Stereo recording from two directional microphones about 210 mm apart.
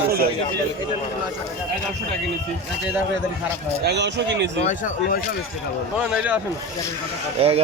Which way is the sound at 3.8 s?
55° right (ahead or behind).